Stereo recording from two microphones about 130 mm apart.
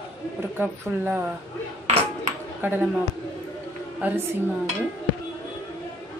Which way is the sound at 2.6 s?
15° right (ahead or behind).